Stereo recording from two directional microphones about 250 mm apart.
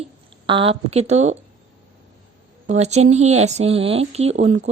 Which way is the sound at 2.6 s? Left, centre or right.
Right.